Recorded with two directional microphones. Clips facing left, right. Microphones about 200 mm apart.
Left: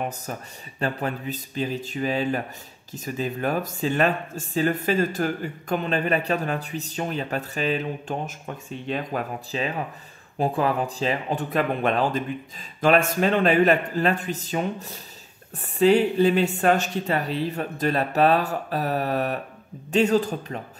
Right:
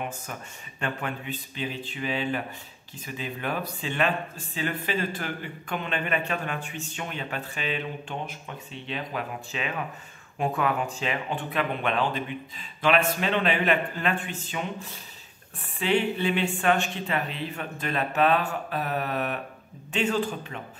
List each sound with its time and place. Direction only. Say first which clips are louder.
0.0 s speech: left 4 dB; 40° left (ahead or behind)